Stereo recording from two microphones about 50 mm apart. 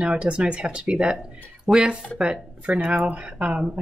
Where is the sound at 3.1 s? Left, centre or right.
Right.